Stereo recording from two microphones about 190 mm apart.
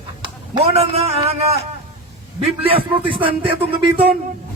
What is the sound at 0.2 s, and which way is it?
A man's voice, 30° right (ahead or behind).